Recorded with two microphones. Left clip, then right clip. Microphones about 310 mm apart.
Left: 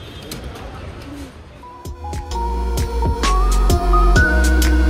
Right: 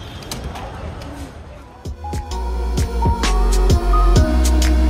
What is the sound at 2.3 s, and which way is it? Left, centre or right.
Music, centre.